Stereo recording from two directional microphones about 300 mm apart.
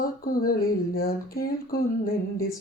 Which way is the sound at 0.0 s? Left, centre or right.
Left.